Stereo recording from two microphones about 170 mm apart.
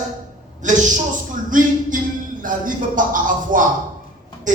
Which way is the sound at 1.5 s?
50° right (ahead or behind).